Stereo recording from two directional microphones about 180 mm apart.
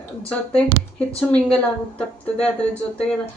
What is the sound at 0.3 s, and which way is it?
Speech, 5° left (ahead or behind).